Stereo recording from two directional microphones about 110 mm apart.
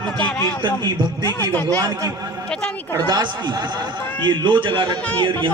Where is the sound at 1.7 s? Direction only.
30° right (ahead or behind).